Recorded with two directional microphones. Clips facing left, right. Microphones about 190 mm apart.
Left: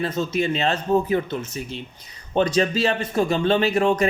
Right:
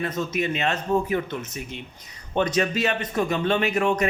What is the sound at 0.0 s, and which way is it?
A man's voice, 30° left (ahead or behind).